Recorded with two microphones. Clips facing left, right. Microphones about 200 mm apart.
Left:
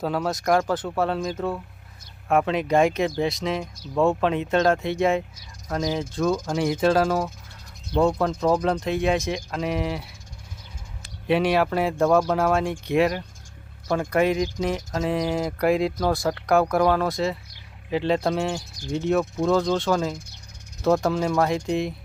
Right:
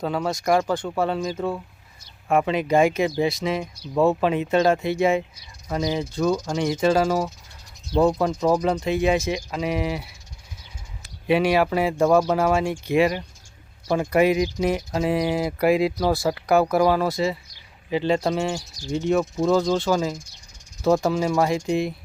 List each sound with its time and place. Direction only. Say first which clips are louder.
0.0 s speech: even; centre (ahead or behind)
11.3 s speech: right 1 dB; centre (ahead or behind)